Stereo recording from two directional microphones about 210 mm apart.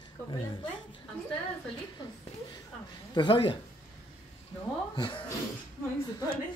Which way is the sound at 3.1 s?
25° left (ahead or behind).